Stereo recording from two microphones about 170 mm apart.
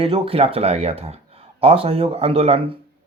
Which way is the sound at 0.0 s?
35° right (ahead or behind).